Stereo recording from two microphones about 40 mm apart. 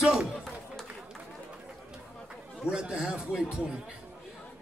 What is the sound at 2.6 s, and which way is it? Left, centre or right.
Speech, right.